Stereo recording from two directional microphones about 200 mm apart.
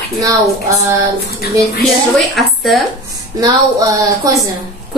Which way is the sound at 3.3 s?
15° right (ahead or behind).